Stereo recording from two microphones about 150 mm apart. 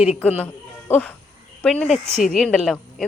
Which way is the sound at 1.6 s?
5° left (ahead or behind).